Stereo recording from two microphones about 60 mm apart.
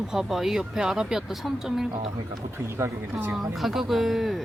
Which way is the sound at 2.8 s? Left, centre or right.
Right.